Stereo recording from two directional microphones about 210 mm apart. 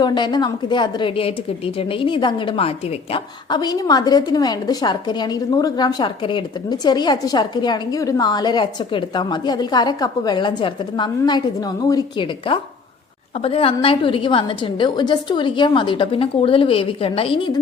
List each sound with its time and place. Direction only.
0.0 s a woman's voice: 20° left (ahead or behind)